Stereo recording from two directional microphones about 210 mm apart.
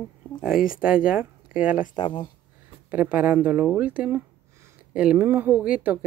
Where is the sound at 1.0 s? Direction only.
5° right (ahead or behind).